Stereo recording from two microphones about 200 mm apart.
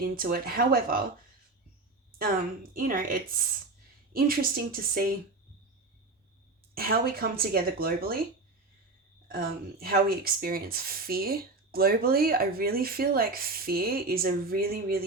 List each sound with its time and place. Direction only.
0.0 s speech: 45° right (ahead or behind)
2.7 s speech: 45° right (ahead or behind)
6.7 s speech: 50° right (ahead or behind)
9.3 s speech: 50° right (ahead or behind)